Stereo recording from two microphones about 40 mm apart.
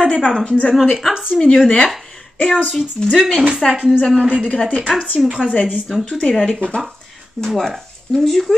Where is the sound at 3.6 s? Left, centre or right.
Centre.